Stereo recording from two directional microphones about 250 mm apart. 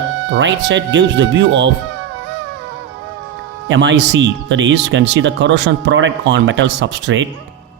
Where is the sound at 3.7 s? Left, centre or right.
Right.